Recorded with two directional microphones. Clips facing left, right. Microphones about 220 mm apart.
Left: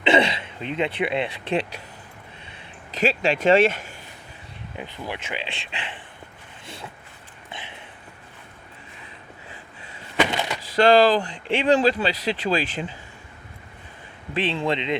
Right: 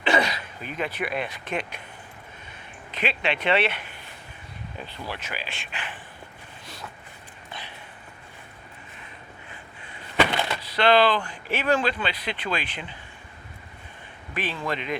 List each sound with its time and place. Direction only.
0.0 s speech: 25° left (ahead or behind)
3.0 s speech: 40° left (ahead or behind)
4.8 s speech: 15° left (ahead or behind)
10.2 s a sound: 15° left (ahead or behind)
10.8 s speech: 45° left (ahead or behind)
14.3 s a man's voice: 25° left (ahead or behind)